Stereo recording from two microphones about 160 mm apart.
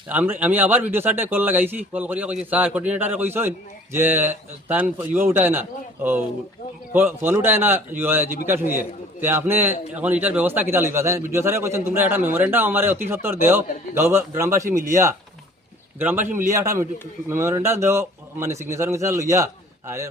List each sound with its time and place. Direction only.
0.1 s a man's voice: 10° right (ahead or behind)
7.3 s a man's voice: 15° right (ahead or behind)